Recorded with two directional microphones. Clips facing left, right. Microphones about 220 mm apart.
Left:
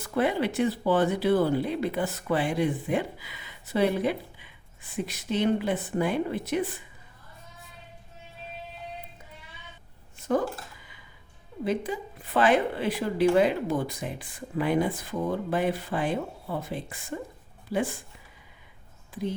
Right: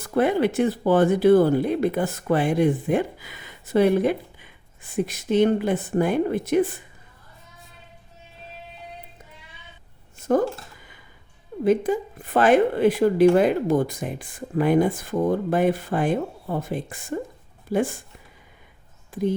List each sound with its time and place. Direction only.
0.0 s speech: 45° right (ahead or behind)
10.2 s a sound: 45° right (ahead or behind)
11.6 s speech: 45° right (ahead or behind)